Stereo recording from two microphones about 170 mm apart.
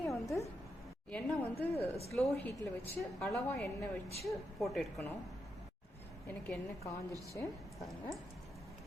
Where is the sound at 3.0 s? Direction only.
Centre (ahead or behind).